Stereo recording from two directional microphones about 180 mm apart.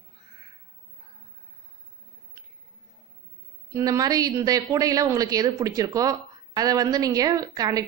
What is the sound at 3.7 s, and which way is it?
A woman's voice, 20° right (ahead or behind).